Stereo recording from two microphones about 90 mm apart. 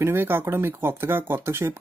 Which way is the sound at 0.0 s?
25° right (ahead or behind).